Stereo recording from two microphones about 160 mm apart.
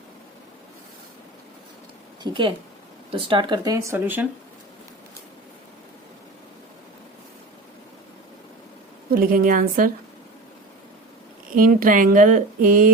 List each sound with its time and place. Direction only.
2.2 s speech: 30° right (ahead or behind); by 4.3 s 10° right (ahead or behind)
9.0 s speech: 65° right (ahead or behind)
11.5 s speech: 60° right (ahead or behind)